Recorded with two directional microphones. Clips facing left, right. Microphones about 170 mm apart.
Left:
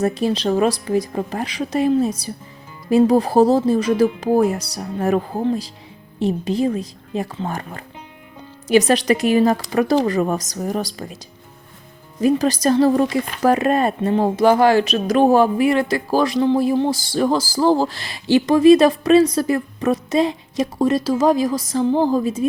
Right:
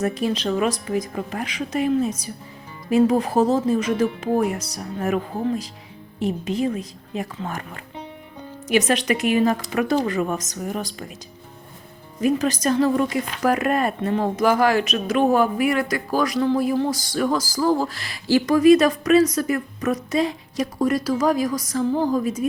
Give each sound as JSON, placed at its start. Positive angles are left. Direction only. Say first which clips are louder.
{"t": 0.0, "sound": "a woman's voice", "louder": "left 4 dB", "side_deg": 30}
{"t": 12.2, "sound": "speech", "louder": "left 4 dB", "side_deg": 35}